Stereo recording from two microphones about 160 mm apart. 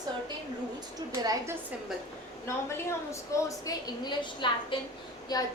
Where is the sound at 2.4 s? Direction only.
15° left (ahead or behind).